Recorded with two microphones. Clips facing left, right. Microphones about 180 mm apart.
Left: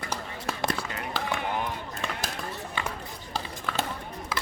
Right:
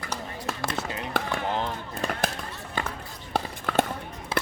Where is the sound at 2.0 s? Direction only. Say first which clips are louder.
Right 5 dB; 40° right (ahead or behind).